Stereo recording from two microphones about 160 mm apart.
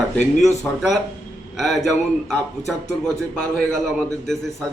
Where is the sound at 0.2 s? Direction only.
50° left (ahead or behind).